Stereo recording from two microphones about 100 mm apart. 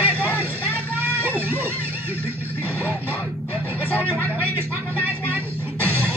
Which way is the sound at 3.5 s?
20° right (ahead or behind).